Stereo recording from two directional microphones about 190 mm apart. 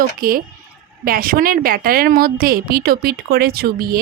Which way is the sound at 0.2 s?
50° right (ahead or behind).